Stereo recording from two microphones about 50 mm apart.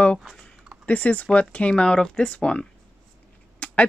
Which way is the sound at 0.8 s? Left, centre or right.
Left.